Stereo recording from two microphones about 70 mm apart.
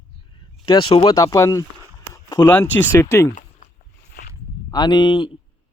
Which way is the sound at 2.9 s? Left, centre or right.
Left.